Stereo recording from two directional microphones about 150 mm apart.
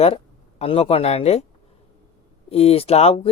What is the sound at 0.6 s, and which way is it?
Speech, 40° left (ahead or behind).